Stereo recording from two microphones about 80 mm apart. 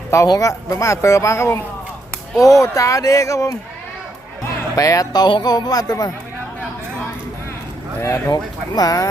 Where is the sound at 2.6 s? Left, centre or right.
Left.